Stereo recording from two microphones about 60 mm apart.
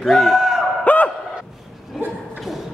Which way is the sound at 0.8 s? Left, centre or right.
Left.